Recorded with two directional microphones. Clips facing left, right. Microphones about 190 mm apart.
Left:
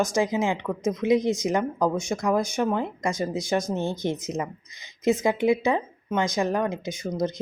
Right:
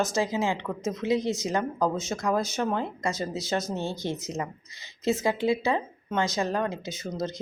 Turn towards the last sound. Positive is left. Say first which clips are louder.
# left 4 dB
turn(degrees=15)  # may be behind; listen again after turning